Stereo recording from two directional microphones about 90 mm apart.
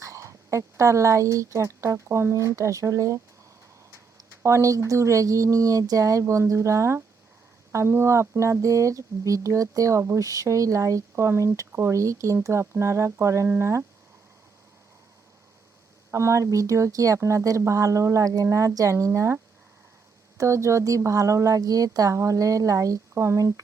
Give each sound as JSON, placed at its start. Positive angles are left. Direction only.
{"t": 0.0, "sound": "speech", "side_deg": -35}
{"t": 4.4, "sound": "a woman's voice", "side_deg": -35}
{"t": 16.1, "sound": "a woman's voice", "side_deg": -35}
{"t": 20.4, "sound": "a woman's voice", "side_deg": -35}